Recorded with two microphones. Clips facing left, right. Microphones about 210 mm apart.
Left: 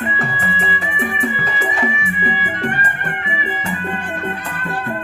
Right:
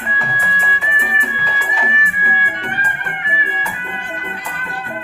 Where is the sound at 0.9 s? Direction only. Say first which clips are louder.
Left 5 dB; 50° left (ahead or behind).